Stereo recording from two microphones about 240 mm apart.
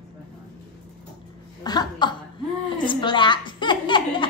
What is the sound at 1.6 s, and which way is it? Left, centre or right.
Chuckle, centre.